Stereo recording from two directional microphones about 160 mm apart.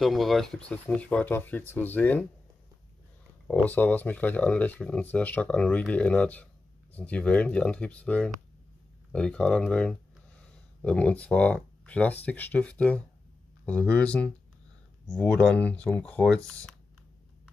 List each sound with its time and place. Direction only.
0.0 s speech: centre (ahead or behind)
3.4 s speech: 10° left (ahead or behind)